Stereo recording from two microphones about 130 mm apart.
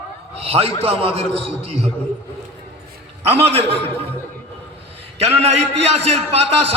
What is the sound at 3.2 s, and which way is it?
Speech, 50° right (ahead or behind).